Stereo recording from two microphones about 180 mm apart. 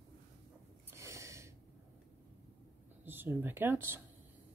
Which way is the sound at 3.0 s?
10° right (ahead or behind).